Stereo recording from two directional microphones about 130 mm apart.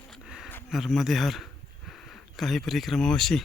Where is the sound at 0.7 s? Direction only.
Centre (ahead or behind).